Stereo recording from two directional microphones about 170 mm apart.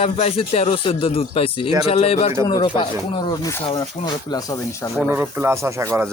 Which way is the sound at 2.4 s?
25° left (ahead or behind).